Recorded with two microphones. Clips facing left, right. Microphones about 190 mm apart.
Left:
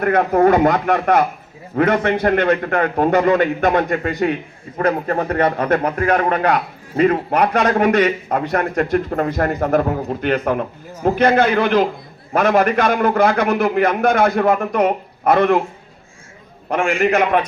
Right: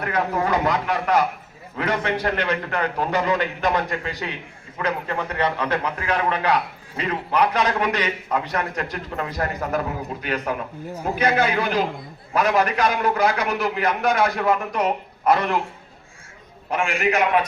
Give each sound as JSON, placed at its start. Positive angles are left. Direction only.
{"t": 0.0, "sound": "a man's voice", "side_deg": 55}
{"t": 16.7, "sound": "a man's voice", "side_deg": 50}